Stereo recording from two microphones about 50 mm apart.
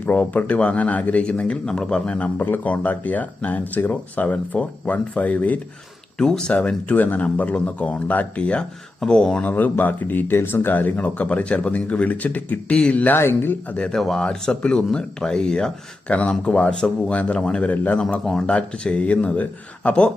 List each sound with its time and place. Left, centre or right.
0.0 s speech: left; by 2.0 s centre
2.0 s speech: left
6.1 s speech: centre
6.5 s speech: left
9.4 s speech: left
13.1 s speech: left
13.9 s speech: centre
14.2 s speech: centre
17.7 s speech: left
18.0 s speech: centre